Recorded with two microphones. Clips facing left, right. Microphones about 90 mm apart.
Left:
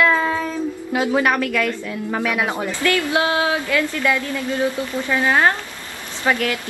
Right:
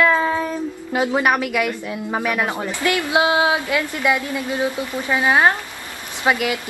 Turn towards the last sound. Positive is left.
turn(degrees=-15)  # may be behind; listen again after turning